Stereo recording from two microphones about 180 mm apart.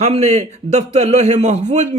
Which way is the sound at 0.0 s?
40° right (ahead or behind).